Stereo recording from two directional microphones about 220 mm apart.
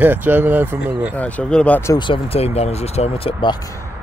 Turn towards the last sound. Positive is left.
turn(degrees=25)  # may be behind; listen again after turning